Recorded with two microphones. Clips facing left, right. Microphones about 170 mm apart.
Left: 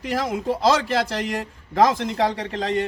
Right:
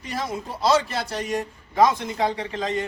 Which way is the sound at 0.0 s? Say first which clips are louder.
Left 5 dB; 90° left.